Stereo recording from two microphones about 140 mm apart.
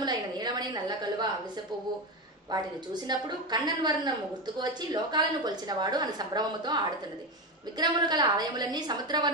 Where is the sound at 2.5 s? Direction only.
30° right (ahead or behind).